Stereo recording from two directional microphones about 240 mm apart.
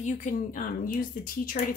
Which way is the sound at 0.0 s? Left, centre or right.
Left.